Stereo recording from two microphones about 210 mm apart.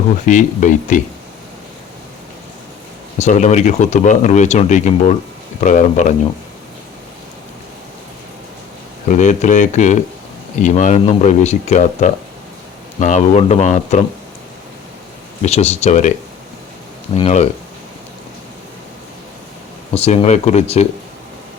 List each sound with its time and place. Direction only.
0.3 s speech: 35° left (ahead or behind)
3.2 s speech: 35° left (ahead or behind)
9.0 s speech: 35° left (ahead or behind)
15.4 s speech: 30° left (ahead or behind)
17.2 s speech: 30° left (ahead or behind)
19.9 s speech: 30° left (ahead or behind)